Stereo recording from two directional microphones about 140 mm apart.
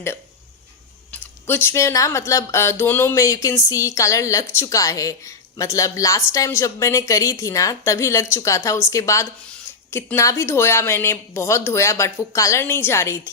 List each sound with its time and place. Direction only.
1.1 s speech: 15° left (ahead or behind)